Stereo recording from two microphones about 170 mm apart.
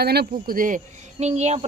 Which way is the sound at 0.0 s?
70° right (ahead or behind).